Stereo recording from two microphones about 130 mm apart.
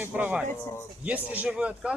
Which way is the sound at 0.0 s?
10° right (ahead or behind).